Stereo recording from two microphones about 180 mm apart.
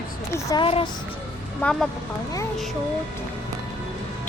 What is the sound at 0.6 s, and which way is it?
Speech, 30° left (ahead or behind).